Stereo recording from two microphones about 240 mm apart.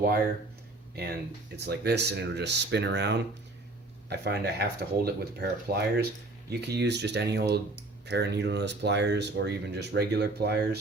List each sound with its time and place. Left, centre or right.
1.5 s speech: right